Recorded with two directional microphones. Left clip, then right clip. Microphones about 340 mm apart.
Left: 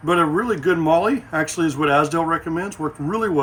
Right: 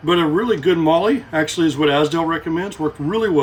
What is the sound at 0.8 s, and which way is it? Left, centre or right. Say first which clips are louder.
Speech: right 2 dB; centre.